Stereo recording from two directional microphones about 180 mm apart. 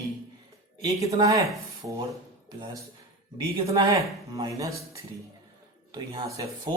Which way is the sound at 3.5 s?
30° right (ahead or behind).